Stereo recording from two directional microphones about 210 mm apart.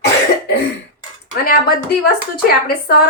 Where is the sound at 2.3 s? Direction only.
45° left (ahead or behind).